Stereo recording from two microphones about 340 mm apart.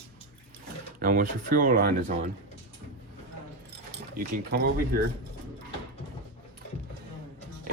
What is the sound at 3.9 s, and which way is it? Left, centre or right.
Speech, right.